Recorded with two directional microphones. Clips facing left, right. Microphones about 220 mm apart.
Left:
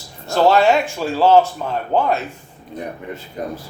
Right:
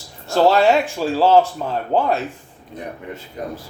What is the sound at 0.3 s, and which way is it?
Speech, 35° right (ahead or behind).